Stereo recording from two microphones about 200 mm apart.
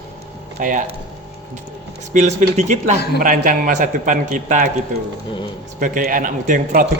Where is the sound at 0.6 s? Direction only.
40° right (ahead or behind).